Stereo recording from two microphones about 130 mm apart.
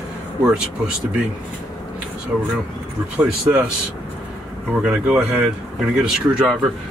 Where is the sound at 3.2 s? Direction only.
10° right (ahead or behind).